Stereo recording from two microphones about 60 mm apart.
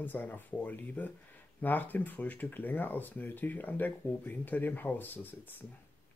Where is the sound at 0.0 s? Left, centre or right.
Left.